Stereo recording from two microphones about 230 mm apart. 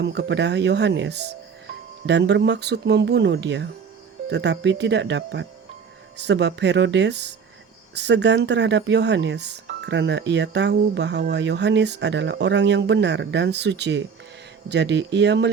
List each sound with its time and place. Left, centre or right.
0.0 s speech: right